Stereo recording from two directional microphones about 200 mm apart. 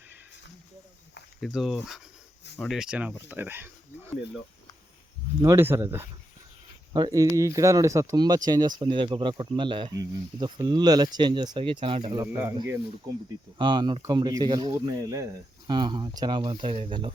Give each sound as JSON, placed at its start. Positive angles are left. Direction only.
{"t": 1.4, "sound": "speech", "side_deg": 0}
{"t": 5.4, "sound": "speech", "side_deg": -15}
{"t": 13.6, "sound": "speech", "side_deg": -20}